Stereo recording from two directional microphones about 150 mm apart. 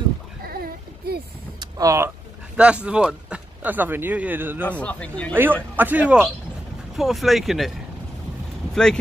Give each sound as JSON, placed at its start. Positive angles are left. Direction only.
{"t": 0.4, "sound": "a sound", "side_deg": -80}
{"t": 1.6, "sound": "vehicle", "side_deg": -20}
{"t": 2.5, "sound": "speech", "side_deg": -5}
{"t": 4.6, "sound": "speech", "side_deg": 10}
{"t": 5.3, "sound": "speech", "side_deg": -15}